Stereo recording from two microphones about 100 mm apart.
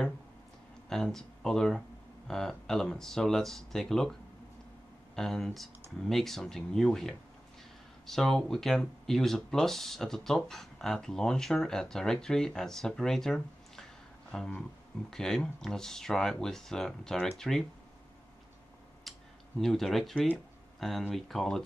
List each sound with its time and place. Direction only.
0.8 s speech: 5° left (ahead or behind)
5.1 s speech: 5° left (ahead or behind)
14.3 s a sound: 5° left (ahead or behind)
15.0 s speech: 5° left (ahead or behind)
19.1 s a sound: centre (ahead or behind)
19.6 s speech: centre (ahead or behind)